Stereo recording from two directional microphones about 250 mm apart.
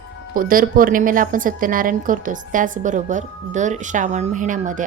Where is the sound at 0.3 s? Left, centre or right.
Right.